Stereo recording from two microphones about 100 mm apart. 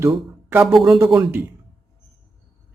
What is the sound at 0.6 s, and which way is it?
Speech, 5° right (ahead or behind).